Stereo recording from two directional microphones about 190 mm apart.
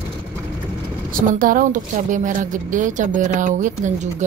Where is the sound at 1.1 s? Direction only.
45° right (ahead or behind).